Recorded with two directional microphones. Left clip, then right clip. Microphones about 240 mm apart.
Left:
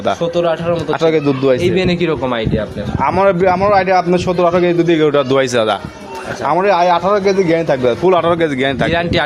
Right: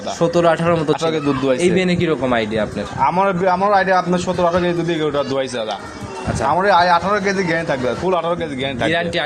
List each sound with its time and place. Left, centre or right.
0.2 s speech: centre
1.0 s a man's voice: left